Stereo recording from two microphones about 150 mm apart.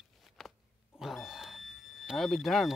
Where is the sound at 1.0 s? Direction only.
Centre (ahead or behind).